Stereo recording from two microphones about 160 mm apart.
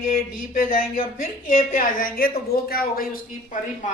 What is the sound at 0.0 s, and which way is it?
Speech, 55° left (ahead or behind).